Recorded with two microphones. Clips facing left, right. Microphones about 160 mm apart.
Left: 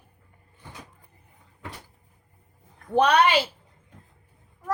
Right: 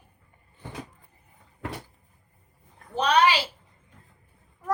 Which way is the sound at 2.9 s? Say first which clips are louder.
Left 2 dB; 60° left (ahead or behind).